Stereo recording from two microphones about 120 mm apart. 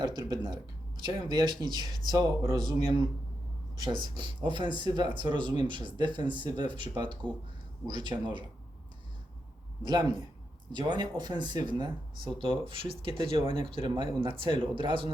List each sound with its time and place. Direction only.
0.0 s speech: 35° right (ahead or behind)
3.8 s speech: 40° right (ahead or behind)
9.8 s speech: 35° right (ahead or behind)